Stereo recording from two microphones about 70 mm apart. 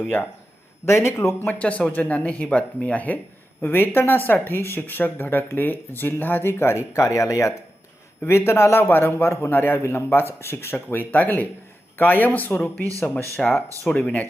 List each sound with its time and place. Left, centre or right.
0.9 s a man's voice: left
1.5 s speech: centre; by 7.5 s left
8.3 s a man's voice: left
10.9 s speech: left